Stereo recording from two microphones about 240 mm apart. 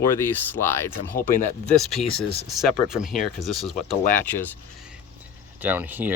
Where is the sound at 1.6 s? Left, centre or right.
Centre.